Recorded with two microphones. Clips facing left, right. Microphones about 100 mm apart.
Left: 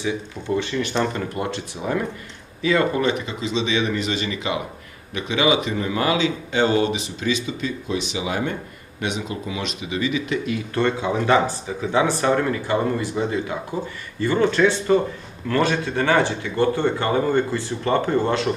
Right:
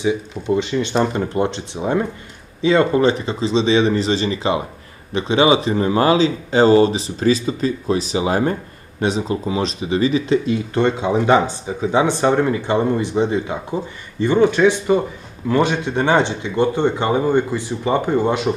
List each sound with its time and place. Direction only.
0.0 s a man's voice: 20° right (ahead or behind)